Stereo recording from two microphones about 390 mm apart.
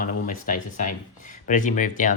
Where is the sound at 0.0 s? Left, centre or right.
Centre.